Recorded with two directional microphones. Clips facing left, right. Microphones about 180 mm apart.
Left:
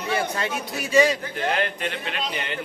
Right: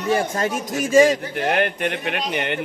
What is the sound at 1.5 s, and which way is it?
A man's voice, 60° right (ahead or behind).